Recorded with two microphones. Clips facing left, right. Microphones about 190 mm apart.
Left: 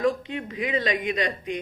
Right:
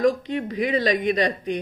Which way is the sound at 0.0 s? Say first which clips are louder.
Right 4 dB; 35° right (ahead or behind).